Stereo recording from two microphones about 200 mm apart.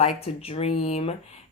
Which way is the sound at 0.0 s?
30° left (ahead or behind).